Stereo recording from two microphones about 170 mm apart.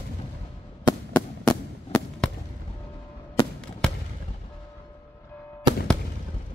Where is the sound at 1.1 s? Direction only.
5° left (ahead or behind).